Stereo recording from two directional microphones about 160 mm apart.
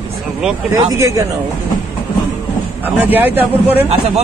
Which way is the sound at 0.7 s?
20° right (ahead or behind).